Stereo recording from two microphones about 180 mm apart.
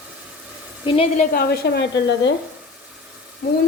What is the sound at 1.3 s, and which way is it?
Speech, 60° left (ahead or behind).